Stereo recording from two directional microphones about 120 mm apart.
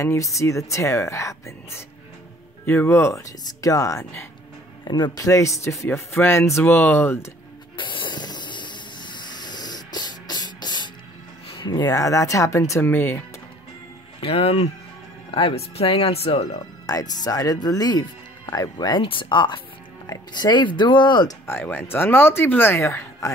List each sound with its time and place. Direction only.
0.0 s speech: 25° left (ahead or behind)
4.8 s speech: 35° left (ahead or behind); by 7.2 s 20° left (ahead or behind)
7.7 s hiss: 40° left (ahead or behind)
11.5 s speech: 40° left (ahead or behind); by 13.2 s 15° left (ahead or behind)
14.2 s speech: 55° left (ahead or behind)
16.8 s speech: 30° left (ahead or behind)
21.5 s speech: 20° left (ahead or behind)